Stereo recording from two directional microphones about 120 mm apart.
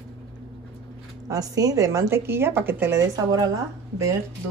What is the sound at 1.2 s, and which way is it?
A woman's voice, 30° right (ahead or behind).